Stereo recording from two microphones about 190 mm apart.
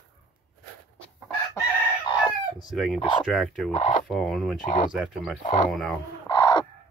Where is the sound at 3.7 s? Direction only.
35° left (ahead or behind).